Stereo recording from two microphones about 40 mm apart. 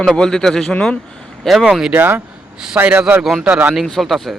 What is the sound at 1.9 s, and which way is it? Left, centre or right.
Speech, right.